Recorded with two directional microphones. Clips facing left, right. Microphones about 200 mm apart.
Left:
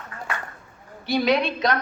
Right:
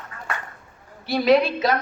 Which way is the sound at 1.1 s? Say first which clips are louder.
Right 3 dB; 5° right (ahead or behind).